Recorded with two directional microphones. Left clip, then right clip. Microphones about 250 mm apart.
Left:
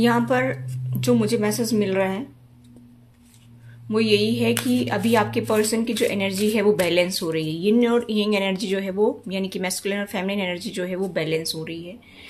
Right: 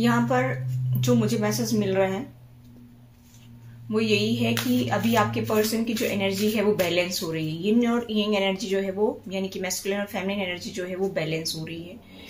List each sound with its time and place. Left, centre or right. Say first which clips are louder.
0.0 s speech: left 3 dB; left
3.9 s speech: left 4 dB; left